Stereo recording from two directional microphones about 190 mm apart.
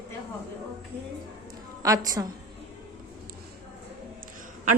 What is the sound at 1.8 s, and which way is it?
Speech, 20° right (ahead or behind).